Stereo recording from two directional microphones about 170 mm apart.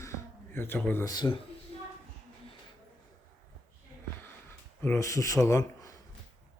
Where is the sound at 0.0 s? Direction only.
15° left (ahead or behind).